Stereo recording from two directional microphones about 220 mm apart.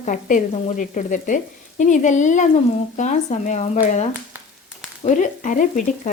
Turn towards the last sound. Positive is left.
turn(degrees=35)  # may be behind; listen again after turning